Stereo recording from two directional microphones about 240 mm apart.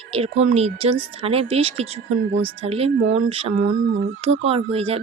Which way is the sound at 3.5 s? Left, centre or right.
Right.